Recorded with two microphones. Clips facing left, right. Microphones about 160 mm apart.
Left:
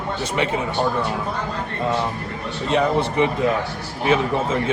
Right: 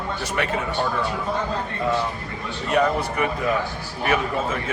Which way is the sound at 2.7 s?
25° left (ahead or behind).